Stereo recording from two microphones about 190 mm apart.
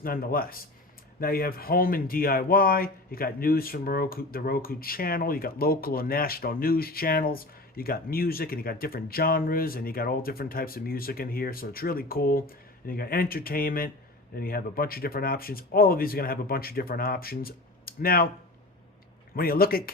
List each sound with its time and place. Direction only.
0.0 s speech: 50° left (ahead or behind)
19.4 s speech: 50° left (ahead or behind)